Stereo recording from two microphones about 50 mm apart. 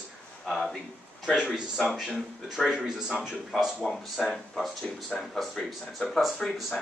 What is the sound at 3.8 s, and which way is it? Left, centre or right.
Speech, centre.